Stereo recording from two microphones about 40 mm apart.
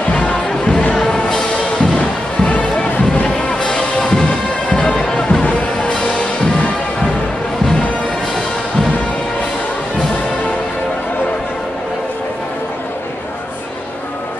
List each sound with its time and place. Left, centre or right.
0.1 s music: left
0.9 s music: centre
3.3 s music: left